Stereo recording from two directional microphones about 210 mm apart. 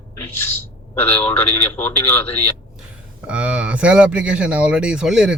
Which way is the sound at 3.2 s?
5° right (ahead or behind).